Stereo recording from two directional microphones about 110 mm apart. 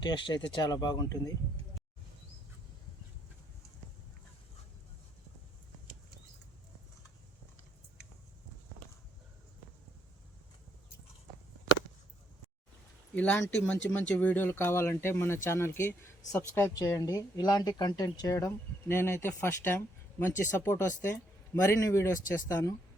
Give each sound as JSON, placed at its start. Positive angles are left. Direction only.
{"t": 0.0, "sound": "speech", "side_deg": 45}
{"t": 13.1, "sound": "speech", "side_deg": 10}